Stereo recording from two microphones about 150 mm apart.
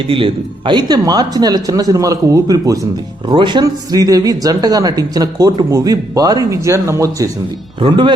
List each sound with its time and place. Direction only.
0.1 s a man's voice: 35° right (ahead or behind)
3.2 s a man's voice: 35° right (ahead or behind)
7.8 s speech: 30° right (ahead or behind)